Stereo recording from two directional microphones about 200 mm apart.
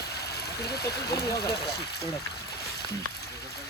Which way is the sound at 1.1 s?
20° left (ahead or behind).